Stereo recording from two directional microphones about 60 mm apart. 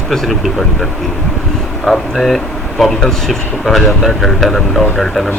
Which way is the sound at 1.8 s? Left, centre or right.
Centre.